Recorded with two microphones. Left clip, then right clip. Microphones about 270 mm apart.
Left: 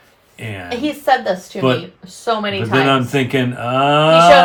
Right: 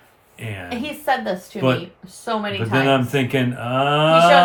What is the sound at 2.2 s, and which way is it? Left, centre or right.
Speech, left.